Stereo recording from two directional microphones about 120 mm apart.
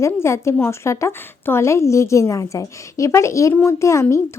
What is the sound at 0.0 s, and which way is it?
Speech, 20° left (ahead or behind).